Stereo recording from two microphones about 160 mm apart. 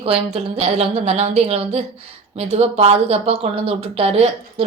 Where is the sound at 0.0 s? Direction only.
35° right (ahead or behind).